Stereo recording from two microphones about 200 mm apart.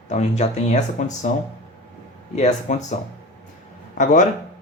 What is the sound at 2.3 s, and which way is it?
Speech, 35° left (ahead or behind).